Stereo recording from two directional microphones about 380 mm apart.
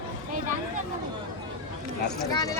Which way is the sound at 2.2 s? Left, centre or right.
Centre.